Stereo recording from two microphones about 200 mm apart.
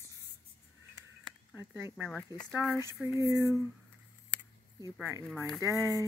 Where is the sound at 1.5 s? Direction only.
10° right (ahead or behind).